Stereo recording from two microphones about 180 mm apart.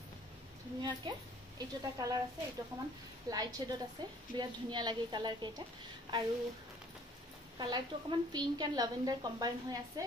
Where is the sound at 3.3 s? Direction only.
20° right (ahead or behind).